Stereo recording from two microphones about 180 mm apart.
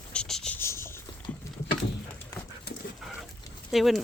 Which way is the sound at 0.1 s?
5° left (ahead or behind).